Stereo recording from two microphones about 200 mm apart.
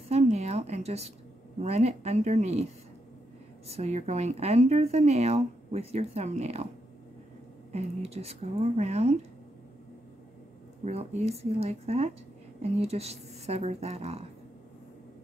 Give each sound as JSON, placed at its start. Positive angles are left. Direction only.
{"t": 0.1, "sound": "a sound", "side_deg": -30}
{"t": 1.6, "sound": "a woman's voice", "side_deg": -30}
{"t": 7.7, "sound": "a woman's voice", "side_deg": -30}
{"t": 10.8, "sound": "a woman's voice", "side_deg": -30}